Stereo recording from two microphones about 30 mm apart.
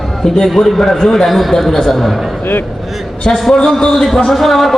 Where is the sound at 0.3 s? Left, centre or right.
Centre.